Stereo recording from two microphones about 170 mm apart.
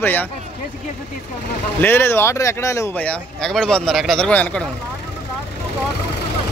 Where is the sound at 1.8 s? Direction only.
15° left (ahead or behind).